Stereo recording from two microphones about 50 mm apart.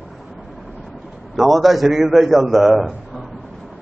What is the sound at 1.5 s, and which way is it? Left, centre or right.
A man's voice, centre.